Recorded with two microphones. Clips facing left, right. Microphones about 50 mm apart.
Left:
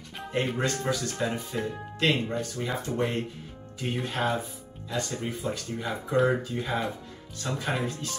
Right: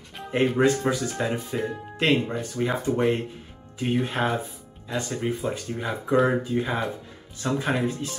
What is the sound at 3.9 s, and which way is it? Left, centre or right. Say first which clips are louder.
Speech: right 4 dB; centre.